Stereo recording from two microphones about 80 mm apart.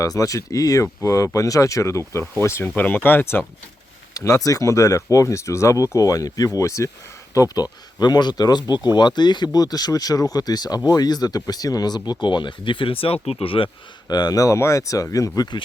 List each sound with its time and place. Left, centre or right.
0.0 s speech: left
2.7 s speech: left
4.1 s speech: left
7.3 s speech: left
14.1 s speech: left